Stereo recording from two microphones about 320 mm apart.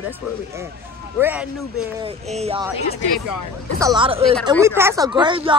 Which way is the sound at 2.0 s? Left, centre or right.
Centre.